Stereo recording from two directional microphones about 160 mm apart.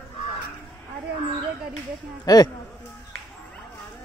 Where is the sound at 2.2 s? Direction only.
25° left (ahead or behind).